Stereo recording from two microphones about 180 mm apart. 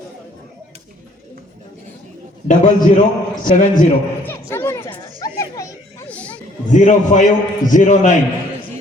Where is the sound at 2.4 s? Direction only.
50° left (ahead or behind).